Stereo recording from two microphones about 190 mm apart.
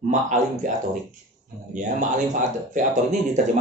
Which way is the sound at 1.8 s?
40° right (ahead or behind).